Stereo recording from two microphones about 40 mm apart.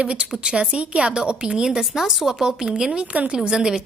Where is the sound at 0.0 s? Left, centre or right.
Right.